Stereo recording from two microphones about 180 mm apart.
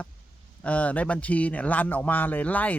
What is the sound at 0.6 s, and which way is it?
Speech, 10° left (ahead or behind).